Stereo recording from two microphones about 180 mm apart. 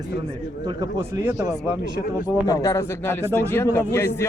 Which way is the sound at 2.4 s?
20° left (ahead or behind).